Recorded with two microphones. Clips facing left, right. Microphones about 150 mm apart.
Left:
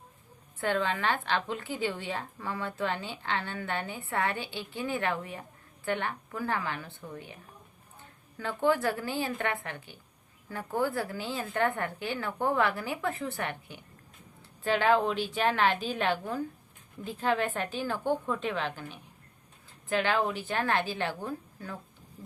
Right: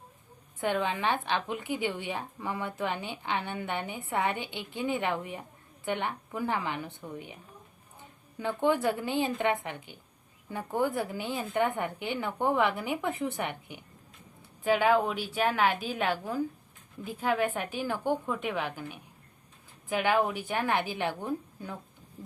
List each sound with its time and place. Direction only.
0.6 s a woman's voice: 15° right (ahead or behind)